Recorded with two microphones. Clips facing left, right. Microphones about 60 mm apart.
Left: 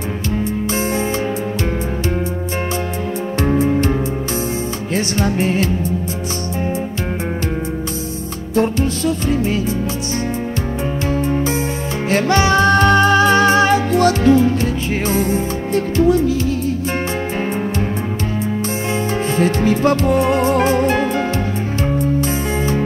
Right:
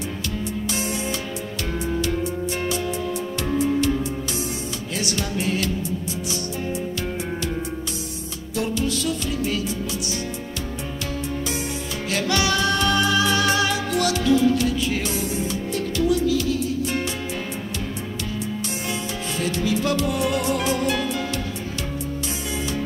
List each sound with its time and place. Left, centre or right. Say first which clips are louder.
3.3 s music: left 8 dB; left
4.9 s music: left 8 dB; left
8.5 s music: left 7 dB; left
12.1 s music: left 8 dB; left
19.3 s music: left 7 dB; left
22.6 s music: left 6 dB; left